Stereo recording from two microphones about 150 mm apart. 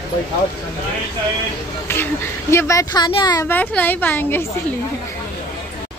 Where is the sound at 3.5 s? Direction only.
10° left (ahead or behind).